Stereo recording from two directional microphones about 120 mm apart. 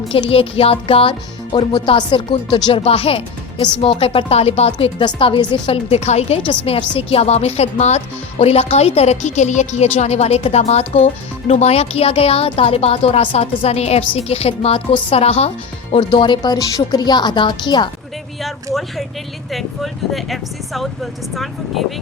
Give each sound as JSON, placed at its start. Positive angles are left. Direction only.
{"t": 0.1, "sound": "speech", "side_deg": 55}
{"t": 1.5, "sound": "speech", "side_deg": 35}
{"t": 7.1, "sound": "speech", "side_deg": 60}
{"t": 16.0, "sound": "speech", "side_deg": 40}
{"t": 18.4, "sound": "speech", "side_deg": 0}